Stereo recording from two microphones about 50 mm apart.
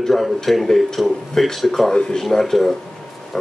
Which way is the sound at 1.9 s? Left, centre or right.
Centre.